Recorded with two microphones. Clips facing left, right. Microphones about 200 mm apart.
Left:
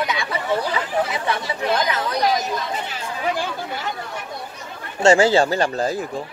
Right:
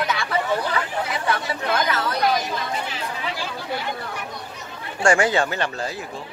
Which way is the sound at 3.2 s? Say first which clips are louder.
Left 10 dB; 50° left (ahead or behind).